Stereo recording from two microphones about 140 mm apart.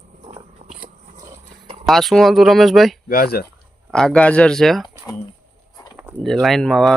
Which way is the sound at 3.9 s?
5° left (ahead or behind).